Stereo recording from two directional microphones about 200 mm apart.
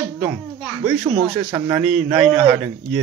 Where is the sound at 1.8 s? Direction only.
Centre (ahead or behind).